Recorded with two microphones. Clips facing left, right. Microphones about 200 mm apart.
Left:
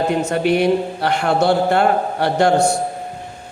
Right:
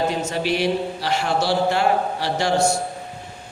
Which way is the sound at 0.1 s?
60° left (ahead or behind).